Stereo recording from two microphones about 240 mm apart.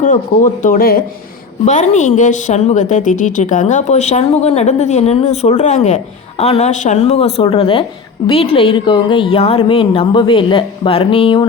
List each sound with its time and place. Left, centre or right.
0.0 s a woman's voice: left